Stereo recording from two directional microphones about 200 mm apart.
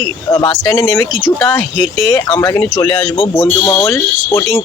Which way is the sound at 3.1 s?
30° left (ahead or behind).